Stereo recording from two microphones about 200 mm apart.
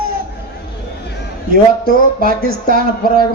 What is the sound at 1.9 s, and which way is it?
Speech, 45° right (ahead or behind).